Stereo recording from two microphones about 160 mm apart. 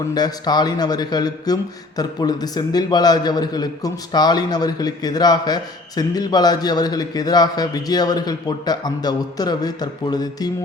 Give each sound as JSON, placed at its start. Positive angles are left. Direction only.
{"t": 0.1, "sound": "a man's voice", "side_deg": 25}